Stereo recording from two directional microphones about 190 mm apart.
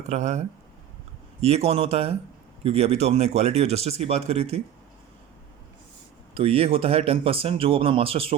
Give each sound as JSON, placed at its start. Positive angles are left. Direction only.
{"t": 0.1, "sound": "speech", "side_deg": -35}
{"t": 6.3, "sound": "speech", "side_deg": -30}